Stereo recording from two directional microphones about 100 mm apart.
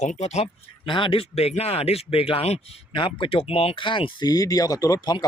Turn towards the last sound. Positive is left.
turn(degrees=40)  # may be behind; listen again after turning